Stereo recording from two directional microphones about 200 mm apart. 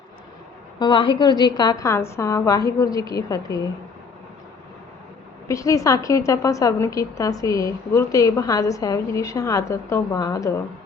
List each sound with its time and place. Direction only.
0.8 s a woman's voice: 25° left (ahead or behind)
5.5 s a woman's voice: 15° left (ahead or behind)